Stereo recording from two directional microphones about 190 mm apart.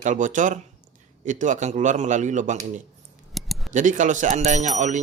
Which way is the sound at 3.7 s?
40° right (ahead or behind).